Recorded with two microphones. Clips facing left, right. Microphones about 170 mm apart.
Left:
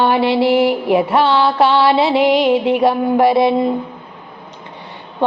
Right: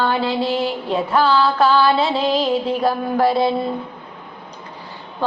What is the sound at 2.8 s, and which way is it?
Mantra, 20° left (ahead or behind).